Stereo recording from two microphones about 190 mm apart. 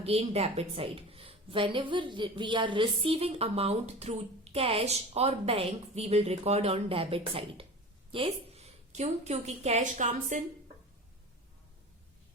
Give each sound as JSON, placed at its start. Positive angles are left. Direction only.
{"t": 0.0, "sound": "a woman's voice", "side_deg": -30}